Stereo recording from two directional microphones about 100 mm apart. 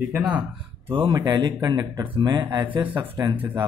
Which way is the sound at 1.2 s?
45° right (ahead or behind).